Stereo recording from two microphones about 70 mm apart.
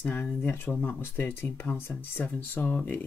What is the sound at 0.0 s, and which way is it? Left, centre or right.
Speech, left.